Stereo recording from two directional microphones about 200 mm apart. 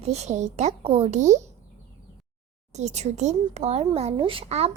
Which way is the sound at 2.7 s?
35° right (ahead or behind).